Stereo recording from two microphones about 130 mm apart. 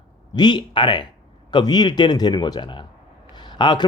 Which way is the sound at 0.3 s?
35° left (ahead or behind).